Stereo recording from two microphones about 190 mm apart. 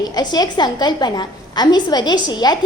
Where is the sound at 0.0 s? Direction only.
20° left (ahead or behind).